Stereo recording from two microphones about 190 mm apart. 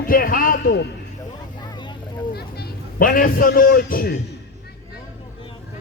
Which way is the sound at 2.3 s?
50° left (ahead or behind).